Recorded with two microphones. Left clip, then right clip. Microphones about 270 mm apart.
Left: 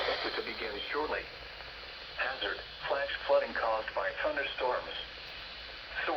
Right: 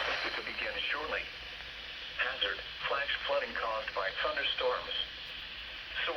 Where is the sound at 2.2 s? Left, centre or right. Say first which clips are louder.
Right 1 dB; centre.